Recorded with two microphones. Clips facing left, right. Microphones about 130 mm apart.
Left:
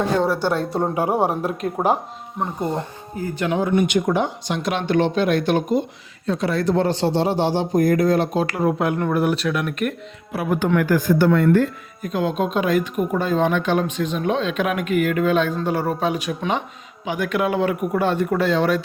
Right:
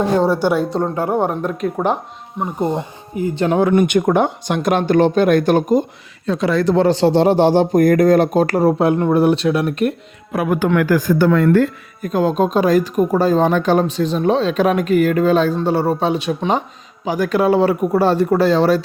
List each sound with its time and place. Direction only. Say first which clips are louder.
0.3 s a woman's voice: right 5 dB; 15° right (ahead or behind)
0.8 s speech: right 2 dB; 15° left (ahead or behind)
3.2 s speech: right 7 dB; 20° right (ahead or behind)
3.8 s speech: right 5 dB; 55° right (ahead or behind)
6.2 s a man's voice: right 4 dB; 90° right; by 9.9 s 30° right (ahead or behind)
10.3 s speech: right 4 dB; 85° right
12.0 s speech: right 5 dB; 40° right (ahead or behind)